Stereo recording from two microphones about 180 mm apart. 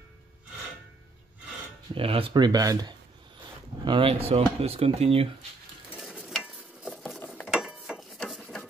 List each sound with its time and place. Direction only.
2.0 s speech: 30° right (ahead or behind)
5.9 s stir: centre (ahead or behind)
6.9 s a sound: 5° left (ahead or behind)
7.5 s gears: 5° right (ahead or behind)